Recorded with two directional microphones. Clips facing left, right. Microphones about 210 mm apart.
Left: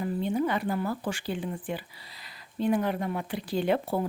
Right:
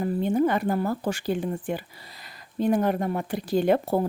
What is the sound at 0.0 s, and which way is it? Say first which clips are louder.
Speech: right 5 dB; 50° right (ahead or behind).